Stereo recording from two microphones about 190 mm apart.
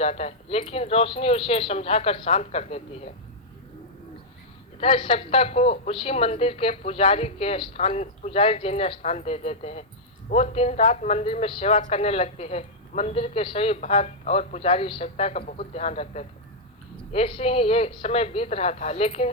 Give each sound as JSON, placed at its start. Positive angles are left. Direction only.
{"t": 0.0, "sound": "speech", "side_deg": 35}
{"t": 4.8, "sound": "speech", "side_deg": 30}